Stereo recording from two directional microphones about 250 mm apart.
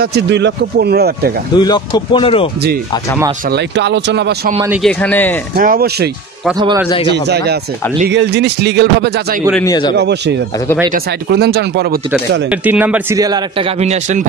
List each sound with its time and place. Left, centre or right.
0.0 s speech: right
1.5 s speech: centre
3.4 s speech: right
4.8 s speech: centre
5.6 s speech: right
6.6 s a man's voice: centre
7.1 s speech: right
9.5 s speech: centre
9.9 s speech: right
12.4 s a man's voice: centre; by 14.2 s right